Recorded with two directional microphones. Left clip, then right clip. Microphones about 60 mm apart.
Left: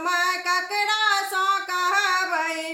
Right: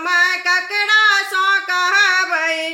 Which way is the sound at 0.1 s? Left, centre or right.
Left.